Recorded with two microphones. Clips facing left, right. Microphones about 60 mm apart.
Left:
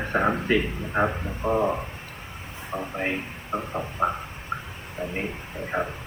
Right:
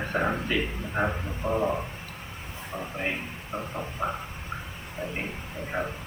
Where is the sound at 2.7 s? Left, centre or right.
Left.